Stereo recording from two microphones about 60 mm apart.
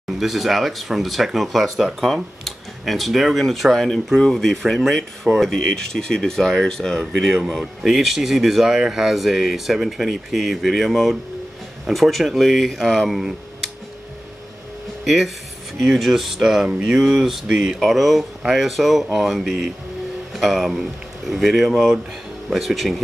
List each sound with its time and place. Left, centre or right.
0.2 s speech: centre
15.0 s speech: centre